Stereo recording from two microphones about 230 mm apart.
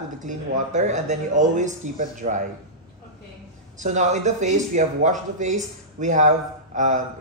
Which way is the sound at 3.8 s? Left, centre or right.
Right.